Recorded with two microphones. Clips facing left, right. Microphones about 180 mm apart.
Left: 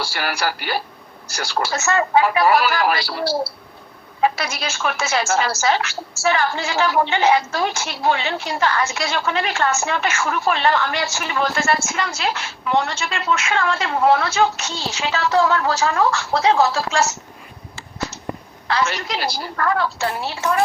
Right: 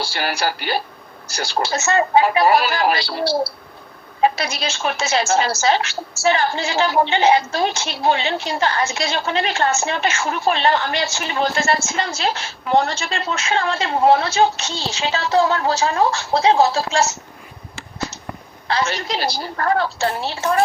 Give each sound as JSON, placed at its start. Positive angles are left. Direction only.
{"t": 0.0, "sound": "a woman's voice", "side_deg": -25}
{"t": 18.7, "sound": "a woman's voice", "side_deg": -30}